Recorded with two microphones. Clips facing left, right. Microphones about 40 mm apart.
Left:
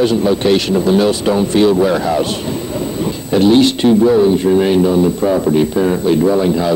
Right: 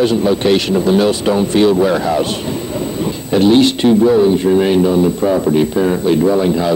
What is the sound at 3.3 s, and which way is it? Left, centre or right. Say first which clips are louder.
Speech: even; right.